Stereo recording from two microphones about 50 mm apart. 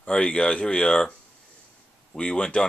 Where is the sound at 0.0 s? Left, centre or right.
Left.